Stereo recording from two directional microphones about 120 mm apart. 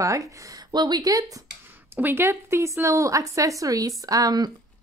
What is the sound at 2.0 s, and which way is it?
Speech, 20° right (ahead or behind).